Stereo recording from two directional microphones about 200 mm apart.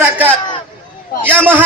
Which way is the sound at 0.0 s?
10° right (ahead or behind).